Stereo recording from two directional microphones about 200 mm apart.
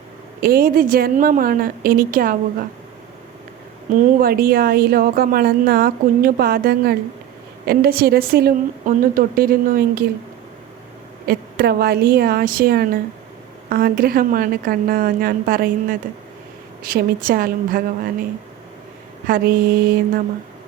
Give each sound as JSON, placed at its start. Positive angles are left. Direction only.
{"t": 0.4, "sound": "a woman's voice", "side_deg": -45}
{"t": 3.9, "sound": "a woman's voice", "side_deg": -45}
{"t": 11.3, "sound": "a woman's voice", "side_deg": -50}
{"t": 19.3, "sound": "a woman's voice", "side_deg": -50}